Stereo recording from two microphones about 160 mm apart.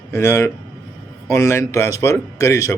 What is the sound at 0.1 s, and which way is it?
A man's voice, 20° left (ahead or behind).